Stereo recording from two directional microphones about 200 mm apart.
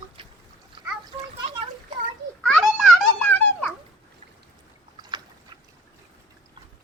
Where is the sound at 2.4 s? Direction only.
Centre (ahead or behind).